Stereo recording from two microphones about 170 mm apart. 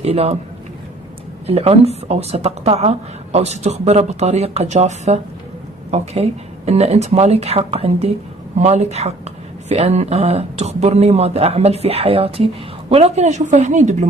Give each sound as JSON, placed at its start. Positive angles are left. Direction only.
{"t": 0.0, "sound": "a woman's voice", "side_deg": -35}
{"t": 1.5, "sound": "a woman's voice", "side_deg": -35}